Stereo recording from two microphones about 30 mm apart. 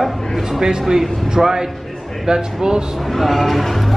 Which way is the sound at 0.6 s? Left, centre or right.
Right.